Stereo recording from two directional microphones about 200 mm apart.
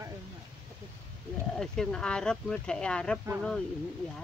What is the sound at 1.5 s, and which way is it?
Speech, 5° left (ahead or behind).